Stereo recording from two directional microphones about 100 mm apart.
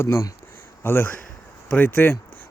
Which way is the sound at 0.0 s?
25° left (ahead or behind).